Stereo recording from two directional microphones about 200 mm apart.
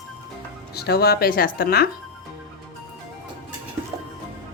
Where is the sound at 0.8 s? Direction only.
50° left (ahead or behind).